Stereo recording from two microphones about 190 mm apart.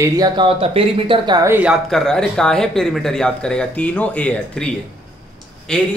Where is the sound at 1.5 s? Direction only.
Centre (ahead or behind).